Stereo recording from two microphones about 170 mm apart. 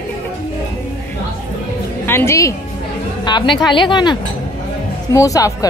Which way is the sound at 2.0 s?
15° left (ahead or behind).